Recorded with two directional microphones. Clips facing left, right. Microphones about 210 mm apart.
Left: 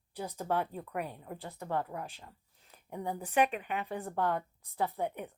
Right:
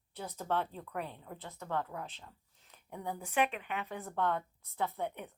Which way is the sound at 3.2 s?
40° left (ahead or behind).